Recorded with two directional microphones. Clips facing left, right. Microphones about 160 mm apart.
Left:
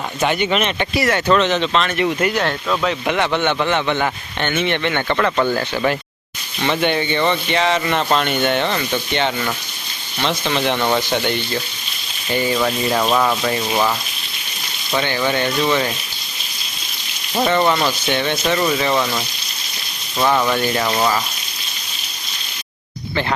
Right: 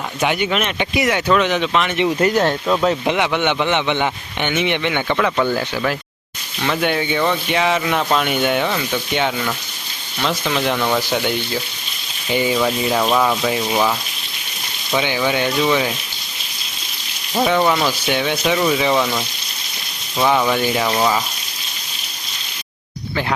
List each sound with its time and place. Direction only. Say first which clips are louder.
0.2 s a man's voice: left 1 dB; 10° right (ahead or behind)
6.6 s a man's voice: left 1 dB; centre (ahead or behind)
12.5 s speech: right 1 dB; 5° right (ahead or behind)
14.9 s a man's voice: right 1 dB; 10° right (ahead or behind)
17.3 s a man's voice: even; 5° right (ahead or behind)
20.1 s a man's voice: right 1 dB; 10° right (ahead or behind)